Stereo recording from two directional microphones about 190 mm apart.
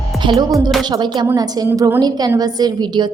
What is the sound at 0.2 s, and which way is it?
A woman's voice, 25° right (ahead or behind).